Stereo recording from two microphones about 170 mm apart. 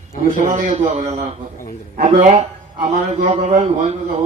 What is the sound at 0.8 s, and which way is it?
A man's voice, 45° right (ahead or behind).